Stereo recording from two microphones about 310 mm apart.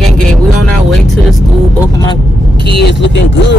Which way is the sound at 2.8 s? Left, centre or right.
Left.